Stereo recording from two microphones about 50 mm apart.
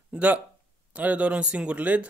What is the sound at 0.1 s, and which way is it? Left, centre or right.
Speech, right.